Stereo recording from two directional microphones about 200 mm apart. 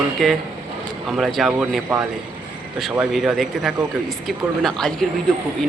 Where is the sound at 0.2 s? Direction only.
Centre (ahead or behind).